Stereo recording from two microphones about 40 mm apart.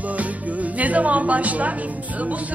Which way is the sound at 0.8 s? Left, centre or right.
Right.